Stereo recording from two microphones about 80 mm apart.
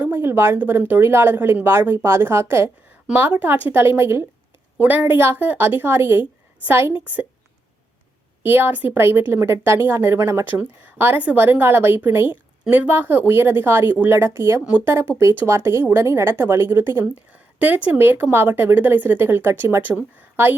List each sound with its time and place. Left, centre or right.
0.0 s a woman's voice: right
7.0 s a woman's voice: right
8.4 s a woman's voice: right
10.6 s a woman's voice: right
17.2 s a woman's voice: centre